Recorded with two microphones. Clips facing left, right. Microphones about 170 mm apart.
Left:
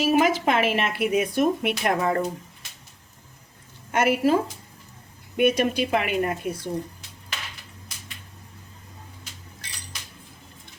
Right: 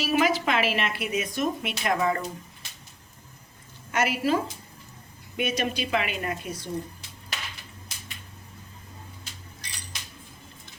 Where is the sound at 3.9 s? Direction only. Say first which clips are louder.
Left 5 dB; 55° left (ahead or behind).